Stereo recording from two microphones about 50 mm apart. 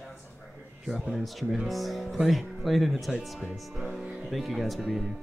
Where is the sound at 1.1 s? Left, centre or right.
Centre.